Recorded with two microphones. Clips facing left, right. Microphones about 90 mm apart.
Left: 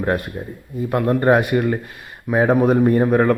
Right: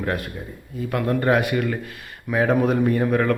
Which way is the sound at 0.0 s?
30° left (ahead or behind).